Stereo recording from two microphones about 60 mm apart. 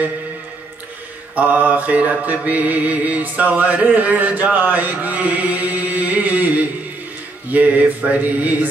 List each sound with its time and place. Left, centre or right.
1.3 s mantra: right